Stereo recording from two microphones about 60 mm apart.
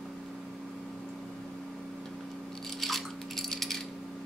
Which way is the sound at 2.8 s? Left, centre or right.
Centre.